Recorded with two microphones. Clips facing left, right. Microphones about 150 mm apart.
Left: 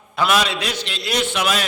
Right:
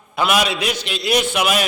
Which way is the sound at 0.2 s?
10° right (ahead or behind).